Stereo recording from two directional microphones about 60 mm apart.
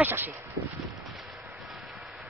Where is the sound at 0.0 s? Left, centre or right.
Right.